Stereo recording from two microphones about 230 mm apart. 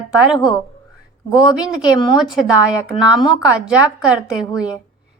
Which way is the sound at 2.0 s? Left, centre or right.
Centre.